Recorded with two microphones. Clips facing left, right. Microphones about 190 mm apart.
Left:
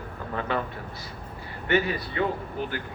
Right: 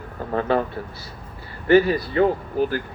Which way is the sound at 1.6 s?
40° right (ahead or behind).